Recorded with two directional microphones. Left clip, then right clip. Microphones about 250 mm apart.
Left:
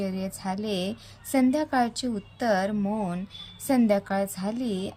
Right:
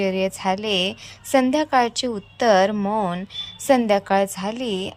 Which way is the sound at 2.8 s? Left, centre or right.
Right.